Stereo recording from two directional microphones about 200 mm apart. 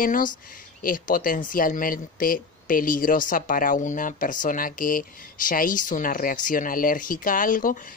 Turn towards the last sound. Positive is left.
turn(degrees=40)  # may be behind; listen again after turning